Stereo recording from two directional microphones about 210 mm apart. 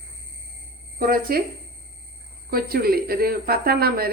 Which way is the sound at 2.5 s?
45° right (ahead or behind).